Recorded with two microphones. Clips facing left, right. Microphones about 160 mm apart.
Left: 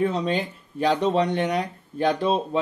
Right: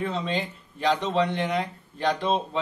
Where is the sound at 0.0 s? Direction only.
45° left (ahead or behind).